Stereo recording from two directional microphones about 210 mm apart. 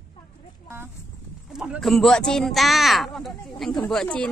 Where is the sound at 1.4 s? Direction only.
5° right (ahead or behind).